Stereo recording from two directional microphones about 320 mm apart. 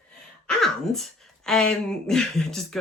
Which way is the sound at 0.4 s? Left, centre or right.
Centre.